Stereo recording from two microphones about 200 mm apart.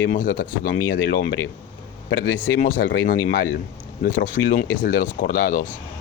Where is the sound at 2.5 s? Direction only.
45° left (ahead or behind).